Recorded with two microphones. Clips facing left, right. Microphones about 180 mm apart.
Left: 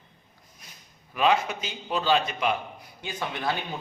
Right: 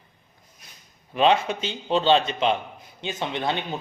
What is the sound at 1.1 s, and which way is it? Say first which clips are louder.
A man's voice: right 3 dB; 25° right (ahead or behind).